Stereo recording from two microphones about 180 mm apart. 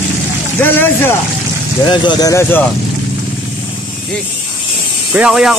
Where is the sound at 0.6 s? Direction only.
10° left (ahead or behind).